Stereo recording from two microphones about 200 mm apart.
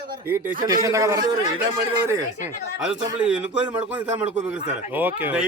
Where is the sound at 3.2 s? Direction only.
5° right (ahead or behind).